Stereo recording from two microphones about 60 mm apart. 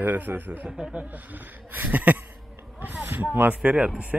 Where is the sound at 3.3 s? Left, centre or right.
Right.